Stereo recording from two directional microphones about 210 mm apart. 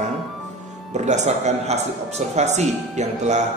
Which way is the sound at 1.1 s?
35° right (ahead or behind).